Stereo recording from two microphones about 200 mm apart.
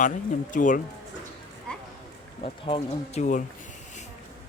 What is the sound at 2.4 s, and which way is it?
Speech, 25° left (ahead or behind).